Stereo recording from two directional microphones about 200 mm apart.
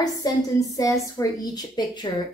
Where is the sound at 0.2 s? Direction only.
15° left (ahead or behind).